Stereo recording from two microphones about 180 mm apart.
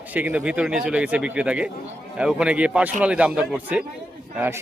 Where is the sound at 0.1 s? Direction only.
10° right (ahead or behind).